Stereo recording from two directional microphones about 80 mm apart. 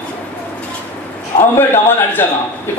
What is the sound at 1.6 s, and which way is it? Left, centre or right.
Speech, left.